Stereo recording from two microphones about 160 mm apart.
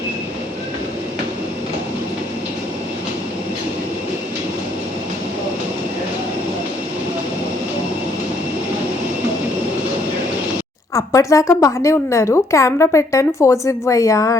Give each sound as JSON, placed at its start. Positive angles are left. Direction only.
{"t": 10.9, "sound": "a woman's voice", "side_deg": 20}